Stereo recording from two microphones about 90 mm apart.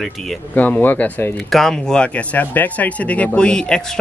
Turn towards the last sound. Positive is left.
turn(degrees=10)  # may be behind; listen again after turning